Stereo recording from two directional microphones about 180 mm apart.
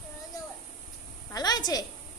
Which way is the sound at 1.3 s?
20° left (ahead or behind).